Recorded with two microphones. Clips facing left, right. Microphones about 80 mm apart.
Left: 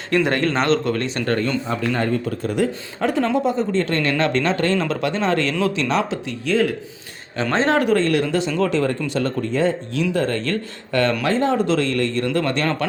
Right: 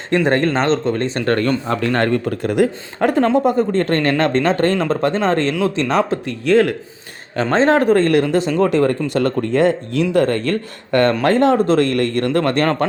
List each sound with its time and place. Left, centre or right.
0.3 s speech: right
1.4 s a man's voice: right
5.9 s speech: right
7.4 s speech: right